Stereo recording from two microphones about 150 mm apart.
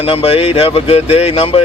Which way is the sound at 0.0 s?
40° left (ahead or behind).